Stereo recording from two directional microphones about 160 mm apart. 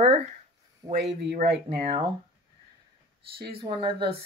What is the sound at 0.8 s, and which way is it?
Speech, 20° right (ahead or behind).